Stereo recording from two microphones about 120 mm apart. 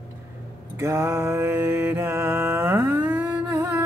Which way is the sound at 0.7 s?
25° right (ahead or behind).